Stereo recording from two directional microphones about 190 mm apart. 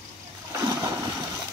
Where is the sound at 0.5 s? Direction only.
15° right (ahead or behind).